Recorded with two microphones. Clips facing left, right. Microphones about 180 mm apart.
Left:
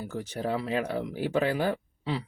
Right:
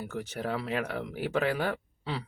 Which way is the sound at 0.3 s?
30° left (ahead or behind).